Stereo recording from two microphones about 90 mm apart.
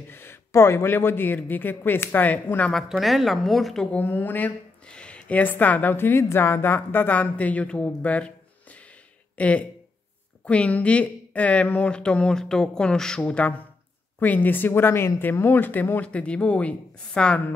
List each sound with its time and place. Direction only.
0.1 s speech: 25° left (ahead or behind)
2.7 s speech: centre (ahead or behind)
3.9 s speech: 20° left (ahead or behind)
9.4 s speech: 15° left (ahead or behind)